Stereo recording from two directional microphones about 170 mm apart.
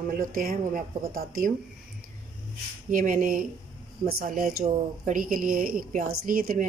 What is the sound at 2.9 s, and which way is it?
A woman's voice, 50° right (ahead or behind).